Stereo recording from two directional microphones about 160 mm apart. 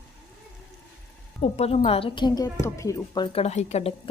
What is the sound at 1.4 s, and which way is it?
A woman's voice, 40° left (ahead or behind).